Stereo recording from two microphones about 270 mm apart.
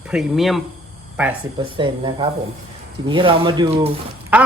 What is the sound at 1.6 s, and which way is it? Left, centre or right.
Speech, centre.